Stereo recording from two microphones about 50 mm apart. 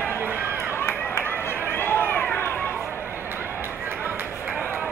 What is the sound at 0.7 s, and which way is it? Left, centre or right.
Run, left.